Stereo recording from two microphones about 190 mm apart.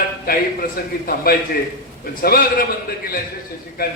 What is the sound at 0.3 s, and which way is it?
A man's voice, 50° left (ahead or behind).